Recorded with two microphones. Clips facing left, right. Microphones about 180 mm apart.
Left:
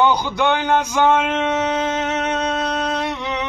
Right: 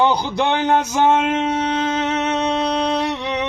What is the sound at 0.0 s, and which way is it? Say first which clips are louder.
Speech: even; 30° right (ahead or behind).